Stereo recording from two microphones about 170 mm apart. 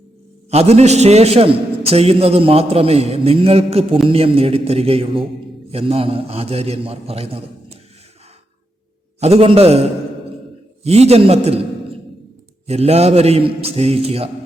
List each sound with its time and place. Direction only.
0.5 s a man's voice: 40° right (ahead or behind)
9.2 s a man's voice: 35° right (ahead or behind)